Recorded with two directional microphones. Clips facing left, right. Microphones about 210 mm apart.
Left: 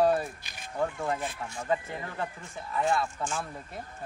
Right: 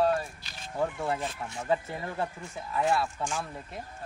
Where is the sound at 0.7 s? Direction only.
5° right (ahead or behind).